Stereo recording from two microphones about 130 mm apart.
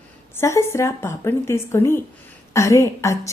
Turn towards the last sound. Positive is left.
turn(degrees=25)  # may be behind; listen again after turning